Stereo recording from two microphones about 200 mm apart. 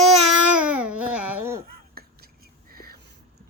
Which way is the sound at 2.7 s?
50° right (ahead or behind).